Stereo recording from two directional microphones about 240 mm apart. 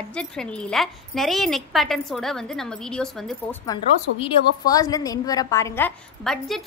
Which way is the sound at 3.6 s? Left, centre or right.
Centre.